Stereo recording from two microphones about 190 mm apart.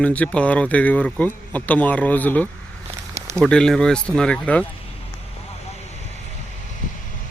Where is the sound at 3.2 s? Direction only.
15° right (ahead or behind).